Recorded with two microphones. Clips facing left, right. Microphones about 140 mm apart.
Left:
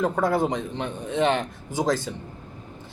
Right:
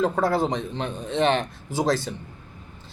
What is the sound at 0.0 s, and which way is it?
Speech, 20° left (ahead or behind).